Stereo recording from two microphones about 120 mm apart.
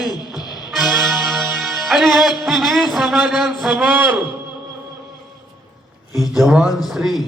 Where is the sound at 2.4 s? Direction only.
Centre (ahead or behind).